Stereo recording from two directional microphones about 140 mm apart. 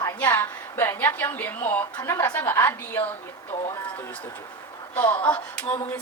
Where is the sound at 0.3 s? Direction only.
15° left (ahead or behind).